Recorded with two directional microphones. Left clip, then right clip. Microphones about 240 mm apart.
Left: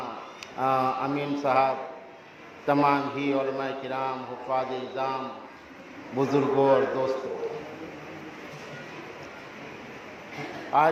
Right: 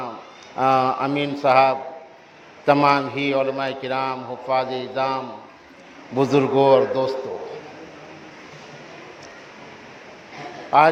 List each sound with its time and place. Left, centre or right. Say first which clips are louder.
0.6 s a man's voice: right 7 dB; right
10.7 s a man's voice: right 7 dB; right